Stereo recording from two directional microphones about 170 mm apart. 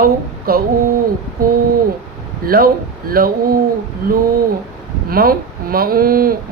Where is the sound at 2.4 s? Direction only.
60° right (ahead or behind).